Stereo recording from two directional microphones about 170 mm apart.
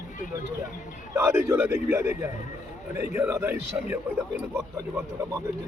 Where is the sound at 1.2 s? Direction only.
15° right (ahead or behind).